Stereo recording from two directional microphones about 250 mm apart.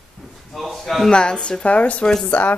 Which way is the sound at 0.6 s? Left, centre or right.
Centre.